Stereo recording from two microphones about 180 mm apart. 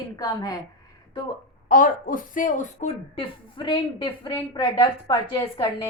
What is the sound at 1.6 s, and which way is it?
A woman's voice, 50° left (ahead or behind).